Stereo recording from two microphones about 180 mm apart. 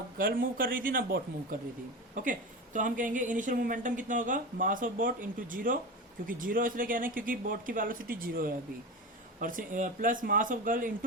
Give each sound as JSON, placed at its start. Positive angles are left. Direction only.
{"t": 0.2, "sound": "a woman's voice", "side_deg": -50}